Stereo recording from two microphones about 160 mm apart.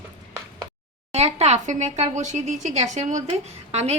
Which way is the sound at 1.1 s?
40° right (ahead or behind).